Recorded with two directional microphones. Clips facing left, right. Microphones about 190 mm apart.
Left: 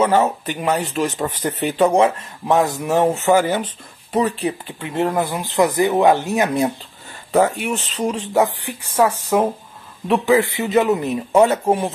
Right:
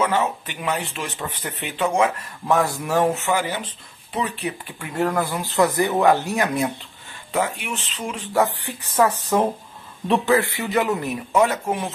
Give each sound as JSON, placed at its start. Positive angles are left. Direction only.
{"t": 0.0, "sound": "speech", "side_deg": 40}
{"t": 2.4, "sound": "speech", "side_deg": 20}
{"t": 3.2, "sound": "speech", "side_deg": 45}
{"t": 7.3, "sound": "speech", "side_deg": 40}
{"t": 8.5, "sound": "speech", "side_deg": 10}
{"t": 11.3, "sound": "speech", "side_deg": 30}